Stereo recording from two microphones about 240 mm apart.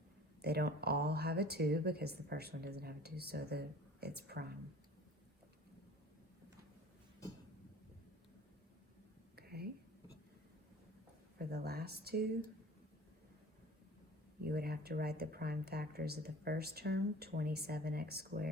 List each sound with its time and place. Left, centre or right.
0.4 s speech: right
9.3 s whispering: right
11.3 s speech: right
14.4 s speech: right